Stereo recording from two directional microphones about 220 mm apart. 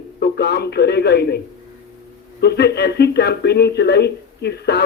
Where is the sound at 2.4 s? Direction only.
50° left (ahead or behind).